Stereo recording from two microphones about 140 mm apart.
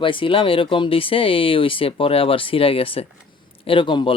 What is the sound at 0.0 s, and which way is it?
Speech, 35° left (ahead or behind).